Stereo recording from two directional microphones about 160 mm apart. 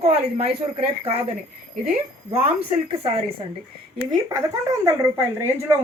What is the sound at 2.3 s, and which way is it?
Speech, 40° right (ahead or behind).